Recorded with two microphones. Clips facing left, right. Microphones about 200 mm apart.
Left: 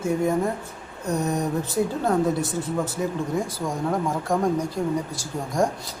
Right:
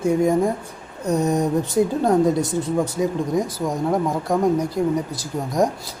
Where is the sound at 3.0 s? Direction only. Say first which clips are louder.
Right 4 dB; 15° right (ahead or behind).